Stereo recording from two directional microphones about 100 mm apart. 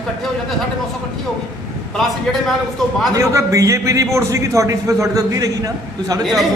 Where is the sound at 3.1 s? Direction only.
30° right (ahead or behind).